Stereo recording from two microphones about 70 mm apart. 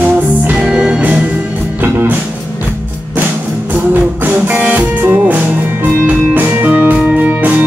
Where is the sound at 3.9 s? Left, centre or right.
Right.